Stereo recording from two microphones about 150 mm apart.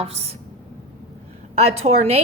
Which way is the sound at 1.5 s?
45° right (ahead or behind).